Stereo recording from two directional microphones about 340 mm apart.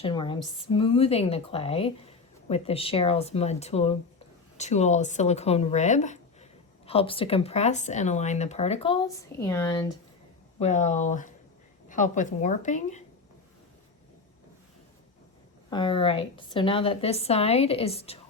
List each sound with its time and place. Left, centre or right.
0.0 s a woman's voice: centre
10.6 s speech: centre
15.7 s a woman's voice: centre